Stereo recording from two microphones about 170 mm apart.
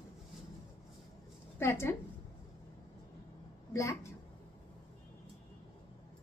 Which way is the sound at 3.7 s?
20° left (ahead or behind).